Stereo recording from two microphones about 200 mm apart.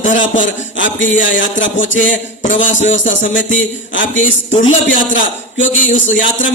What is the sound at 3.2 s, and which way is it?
A man's voice, 70° left (ahead or behind).